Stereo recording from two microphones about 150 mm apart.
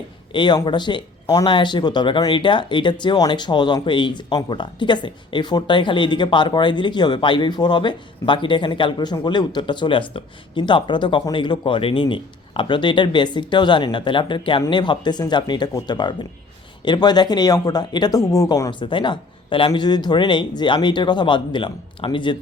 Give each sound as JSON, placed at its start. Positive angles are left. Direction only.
{"t": 0.3, "sound": "speech", "side_deg": 30}